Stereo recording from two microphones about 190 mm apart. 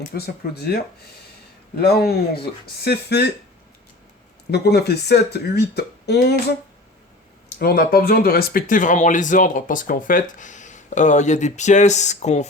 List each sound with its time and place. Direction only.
0.1 s speech: 55° left (ahead or behind)
1.8 s speech: 55° left (ahead or behind)
4.5 s speech: 60° left (ahead or behind); by 12.5 s 35° left (ahead or behind)